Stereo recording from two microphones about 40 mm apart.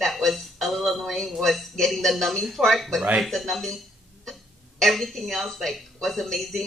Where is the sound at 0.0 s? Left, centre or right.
Centre.